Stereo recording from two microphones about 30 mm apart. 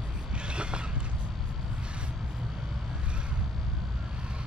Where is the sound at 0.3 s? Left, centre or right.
Right.